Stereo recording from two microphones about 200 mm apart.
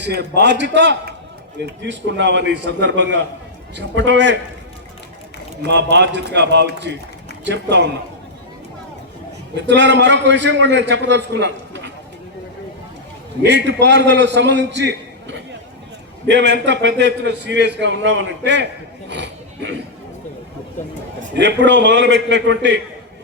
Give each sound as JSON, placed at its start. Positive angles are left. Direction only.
{"t": 0.0, "sound": "a man's voice", "side_deg": -55}
{"t": 5.6, "sound": "a man's voice", "side_deg": -60}
{"t": 9.6, "sound": "a man's voice", "side_deg": -60}
{"t": 13.4, "sound": "a man's voice", "side_deg": -60}
{"t": 21.3, "sound": "a man's voice", "side_deg": -60}